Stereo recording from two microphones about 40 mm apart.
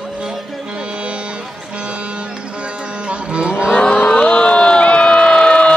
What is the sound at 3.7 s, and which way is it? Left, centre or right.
Vehicle, left.